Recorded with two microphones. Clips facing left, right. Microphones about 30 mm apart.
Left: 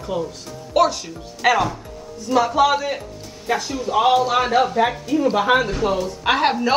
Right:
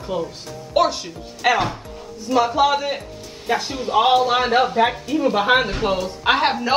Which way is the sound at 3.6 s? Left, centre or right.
Right.